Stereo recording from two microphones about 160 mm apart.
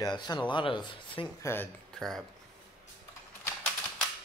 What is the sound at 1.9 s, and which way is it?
Speech, 5° left (ahead or behind).